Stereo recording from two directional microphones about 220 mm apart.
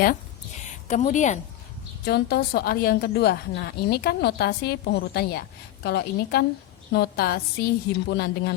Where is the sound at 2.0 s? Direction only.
45° left (ahead or behind).